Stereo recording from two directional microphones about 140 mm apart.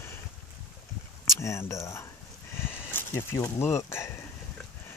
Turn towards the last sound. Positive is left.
turn(degrees=20)  # may be behind; listen again after turning